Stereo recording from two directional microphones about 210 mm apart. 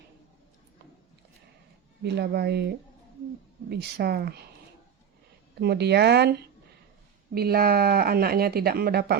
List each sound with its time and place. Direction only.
2.0 s speech: 50° right (ahead or behind)
5.5 s speech: 50° right (ahead or behind)
7.3 s speech: 45° right (ahead or behind)